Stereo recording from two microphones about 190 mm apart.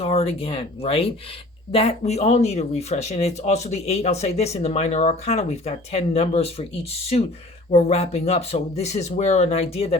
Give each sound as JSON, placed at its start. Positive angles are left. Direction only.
{"t": 0.0, "sound": "speech", "side_deg": 30}